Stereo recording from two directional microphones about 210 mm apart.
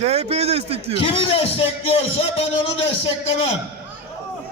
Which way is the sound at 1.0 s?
25° left (ahead or behind).